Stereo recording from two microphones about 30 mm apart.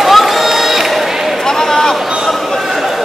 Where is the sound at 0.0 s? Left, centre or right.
Centre.